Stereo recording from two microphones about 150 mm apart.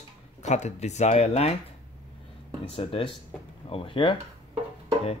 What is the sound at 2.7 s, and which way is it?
Speech, 40° left (ahead or behind).